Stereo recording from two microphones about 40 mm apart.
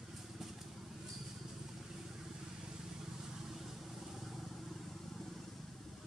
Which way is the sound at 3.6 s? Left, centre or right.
Centre.